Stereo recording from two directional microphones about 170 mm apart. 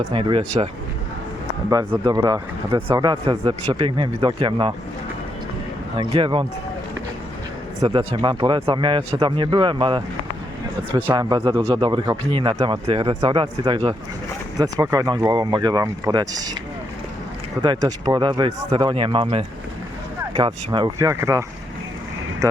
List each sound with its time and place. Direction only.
0.0 s speech: 30° right (ahead or behind)
1.7 s speech: 20° right (ahead or behind)
6.0 s speech: 30° right (ahead or behind)
7.8 s speech: 30° right (ahead or behind)
11.1 s speech: 25° right (ahead or behind)
17.6 s speech: 20° right (ahead or behind)